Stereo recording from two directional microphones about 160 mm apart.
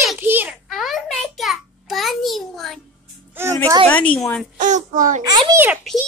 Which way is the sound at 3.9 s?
10° left (ahead or behind).